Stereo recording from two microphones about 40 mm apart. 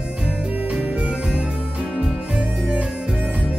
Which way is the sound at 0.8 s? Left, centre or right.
Right.